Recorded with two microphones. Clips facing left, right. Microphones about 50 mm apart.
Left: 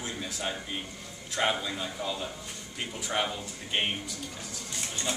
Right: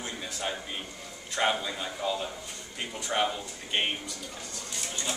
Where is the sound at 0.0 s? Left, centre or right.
Centre.